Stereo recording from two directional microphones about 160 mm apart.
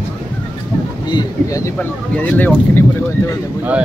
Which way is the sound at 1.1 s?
20° left (ahead or behind).